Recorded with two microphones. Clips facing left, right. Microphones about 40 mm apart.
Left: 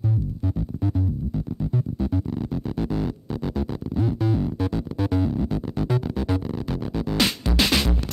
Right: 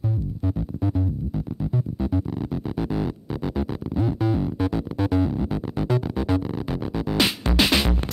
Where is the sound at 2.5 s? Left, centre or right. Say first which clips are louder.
Right 1 dB; centre.